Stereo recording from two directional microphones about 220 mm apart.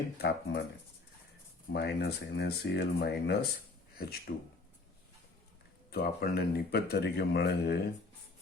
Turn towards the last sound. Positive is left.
turn(degrees=50)  # may be behind; listen again after turning